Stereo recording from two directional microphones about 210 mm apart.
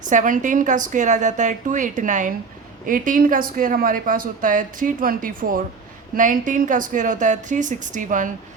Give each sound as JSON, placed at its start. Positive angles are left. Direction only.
{"t": 0.0, "sound": "speech", "side_deg": -35}